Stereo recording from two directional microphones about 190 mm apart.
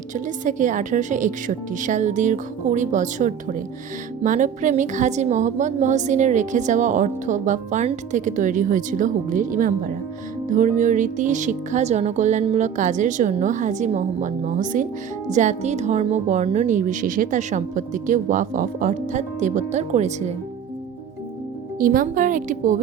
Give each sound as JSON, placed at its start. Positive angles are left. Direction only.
{"t": 0.1, "sound": "a woman's voice", "side_deg": -40}
{"t": 21.8, "sound": "a woman's voice", "side_deg": -45}